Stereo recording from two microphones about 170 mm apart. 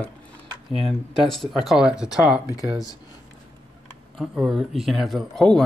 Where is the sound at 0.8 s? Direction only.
Centre (ahead or behind).